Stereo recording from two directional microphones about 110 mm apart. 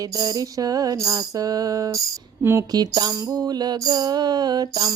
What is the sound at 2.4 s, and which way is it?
Speech, 20° right (ahead or behind).